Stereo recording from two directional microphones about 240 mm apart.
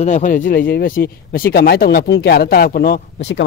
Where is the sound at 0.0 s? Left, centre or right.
Left.